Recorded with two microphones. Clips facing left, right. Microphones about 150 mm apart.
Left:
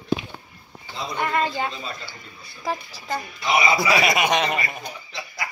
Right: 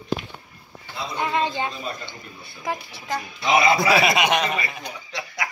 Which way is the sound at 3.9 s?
25° right (ahead or behind).